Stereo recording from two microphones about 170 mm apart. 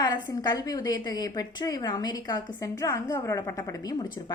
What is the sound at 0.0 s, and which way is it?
A woman's voice, 25° left (ahead or behind).